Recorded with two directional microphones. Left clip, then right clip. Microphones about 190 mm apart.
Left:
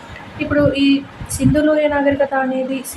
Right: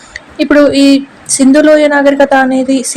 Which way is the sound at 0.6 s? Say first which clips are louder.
Right 8 dB; 35° right (ahead or behind).